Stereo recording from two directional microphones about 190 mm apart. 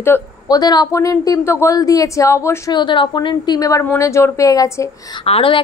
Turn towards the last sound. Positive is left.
turn(degrees=30)  # may be behind; listen again after turning